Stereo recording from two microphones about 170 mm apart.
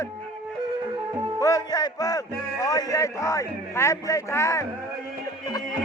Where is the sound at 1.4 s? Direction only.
20° left (ahead or behind).